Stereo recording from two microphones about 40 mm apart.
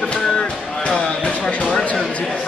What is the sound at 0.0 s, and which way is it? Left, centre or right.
Music, left.